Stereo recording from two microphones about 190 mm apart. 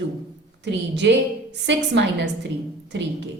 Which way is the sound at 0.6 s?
65° right (ahead or behind).